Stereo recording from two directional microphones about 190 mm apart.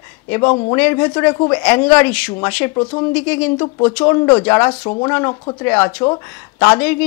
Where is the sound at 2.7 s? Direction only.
25° left (ahead or behind).